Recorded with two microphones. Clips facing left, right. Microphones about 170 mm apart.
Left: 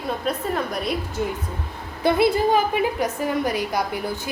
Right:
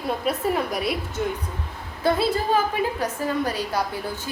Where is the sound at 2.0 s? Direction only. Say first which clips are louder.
Left 3 dB; 15° left (ahead or behind).